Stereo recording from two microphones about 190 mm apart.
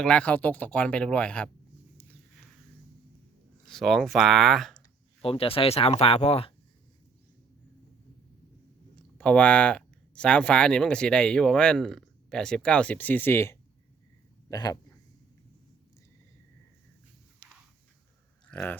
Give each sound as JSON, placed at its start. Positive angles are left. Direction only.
{"t": 0.0, "sound": "speech", "side_deg": 5}
{"t": 3.7, "sound": "speech", "side_deg": 0}
{"t": 5.2, "sound": "speech", "side_deg": 30}
{"t": 9.1, "sound": "speech", "side_deg": 5}
{"t": 18.5, "sound": "pig", "side_deg": 10}